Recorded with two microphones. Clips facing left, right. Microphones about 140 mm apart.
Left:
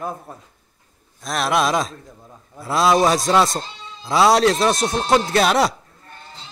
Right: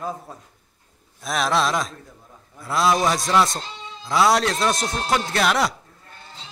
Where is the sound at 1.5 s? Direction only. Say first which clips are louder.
Left 4 dB; 20° left (ahead or behind).